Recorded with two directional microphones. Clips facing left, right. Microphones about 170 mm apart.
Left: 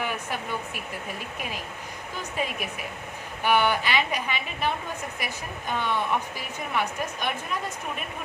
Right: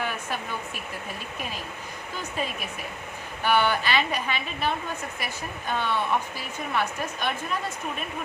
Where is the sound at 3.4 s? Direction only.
15° left (ahead or behind).